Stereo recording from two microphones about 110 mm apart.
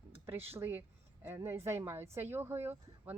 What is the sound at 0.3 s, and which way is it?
A woman's voice, 20° right (ahead or behind).